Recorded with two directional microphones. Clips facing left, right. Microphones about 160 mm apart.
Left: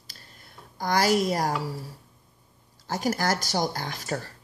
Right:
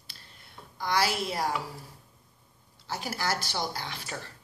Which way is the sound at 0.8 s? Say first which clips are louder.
Left 6 dB; 45° left (ahead or behind).